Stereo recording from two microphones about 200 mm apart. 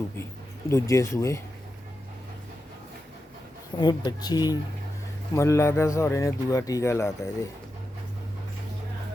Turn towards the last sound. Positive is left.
turn(degrees=15)  # may be behind; listen again after turning